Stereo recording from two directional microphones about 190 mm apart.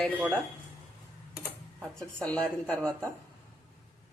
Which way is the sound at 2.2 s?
5° left (ahead or behind).